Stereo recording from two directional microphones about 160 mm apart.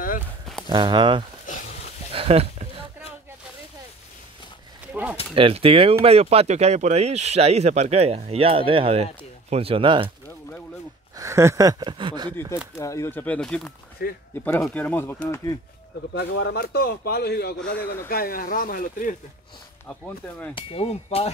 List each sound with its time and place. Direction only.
0.7 s speech: 30° right (ahead or behind)
2.1 s a sound: 35° right (ahead or behind)
5.3 s speech: 35° right (ahead or behind)
11.1 s speech: 20° right (ahead or behind)
12.7 s speech: 20° left (ahead or behind)
14.0 s speech: 65° left (ahead or behind)
14.4 s speech: 15° left (ahead or behind)
16.1 s speech: 90° left
17.6 s speech: 10° left (ahead or behind)
18.0 s speech: 65° left (ahead or behind)
19.9 s speech: 10° left (ahead or behind)
20.5 s speech: 35° left (ahead or behind)